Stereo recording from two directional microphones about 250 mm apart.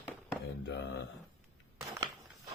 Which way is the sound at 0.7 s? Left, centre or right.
Left.